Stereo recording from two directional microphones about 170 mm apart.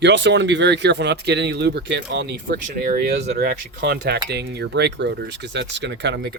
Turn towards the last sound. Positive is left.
turn(degrees=-90)